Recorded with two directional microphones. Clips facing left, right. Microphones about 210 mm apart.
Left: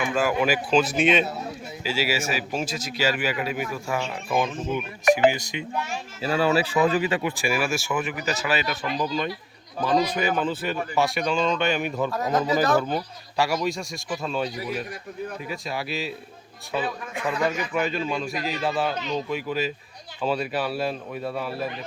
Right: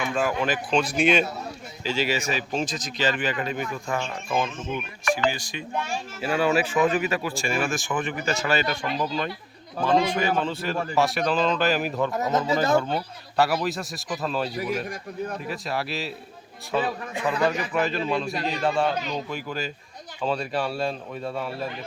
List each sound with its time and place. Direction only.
0.0 s a man's voice: 5° left (ahead or behind)
6.4 s speech: 35° left (ahead or behind)
7.5 s speech: 10° left (ahead or behind)
9.8 s speech: 25° right (ahead or behind)
10.4 s speech: centre (ahead or behind)
12.1 s speech: 25° right (ahead or behind)
13.3 s speech: centre (ahead or behind)
17.7 s speech: centre (ahead or behind)